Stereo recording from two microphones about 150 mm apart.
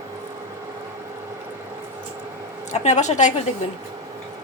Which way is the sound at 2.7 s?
50° left (ahead or behind).